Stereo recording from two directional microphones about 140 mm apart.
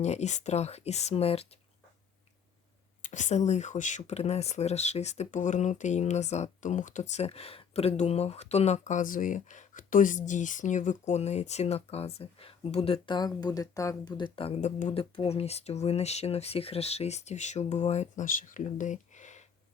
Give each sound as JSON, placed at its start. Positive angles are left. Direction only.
{"t": 0.0, "sound": "speech", "side_deg": 55}
{"t": 3.0, "sound": "speech", "side_deg": 60}
{"t": 13.1, "sound": "speech", "side_deg": 30}
{"t": 14.6, "sound": "speech", "side_deg": 60}
{"t": 14.9, "sound": "speech", "side_deg": 40}